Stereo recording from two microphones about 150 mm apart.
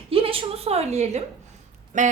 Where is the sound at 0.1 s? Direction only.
40° right (ahead or behind).